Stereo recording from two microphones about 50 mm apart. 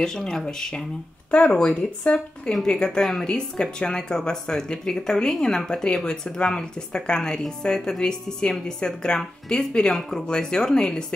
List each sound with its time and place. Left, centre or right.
0.0 s speech: centre; by 2.1 s left
2.6 s speech: centre
3.3 s speech: centre